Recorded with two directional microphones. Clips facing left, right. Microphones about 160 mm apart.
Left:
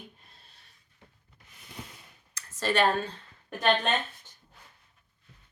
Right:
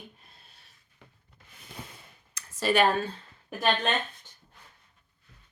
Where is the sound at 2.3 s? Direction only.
10° right (ahead or behind).